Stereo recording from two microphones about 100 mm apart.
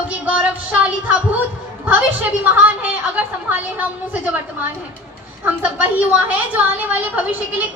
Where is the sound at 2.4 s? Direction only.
15° right (ahead or behind).